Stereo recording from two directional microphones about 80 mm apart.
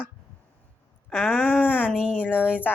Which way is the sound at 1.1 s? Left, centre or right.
Centre.